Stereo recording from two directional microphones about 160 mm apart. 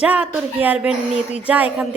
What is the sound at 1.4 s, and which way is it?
Speech, 10° right (ahead or behind).